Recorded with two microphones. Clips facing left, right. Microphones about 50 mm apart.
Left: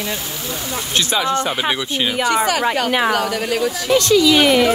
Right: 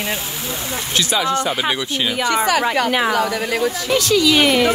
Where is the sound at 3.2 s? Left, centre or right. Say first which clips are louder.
Even; right.